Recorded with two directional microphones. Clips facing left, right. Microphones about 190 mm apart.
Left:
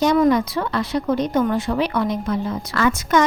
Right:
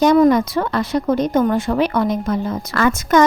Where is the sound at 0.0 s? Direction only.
45° right (ahead or behind).